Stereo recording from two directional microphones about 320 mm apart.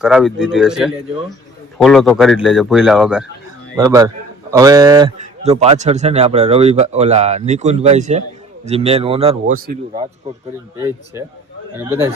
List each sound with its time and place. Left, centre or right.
0.0 s a man's voice: centre; by 10.1 s right
10.8 s speech: centre